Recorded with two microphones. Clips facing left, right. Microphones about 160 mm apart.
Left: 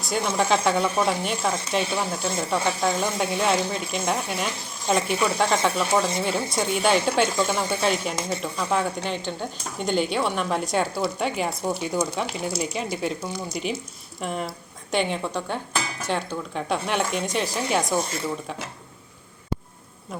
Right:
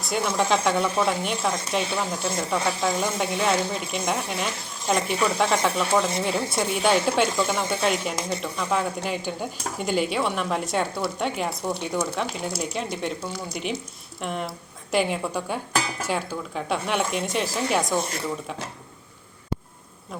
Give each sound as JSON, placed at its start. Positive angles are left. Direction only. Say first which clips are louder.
{"t": 0.0, "sound": "speech", "louder": "even", "side_deg": 0}
{"t": 11.9, "sound": "speech", "louder": "left 1 dB", "side_deg": 15}
{"t": 12.5, "sound": "a woman's voice", "louder": "left 1 dB", "side_deg": 0}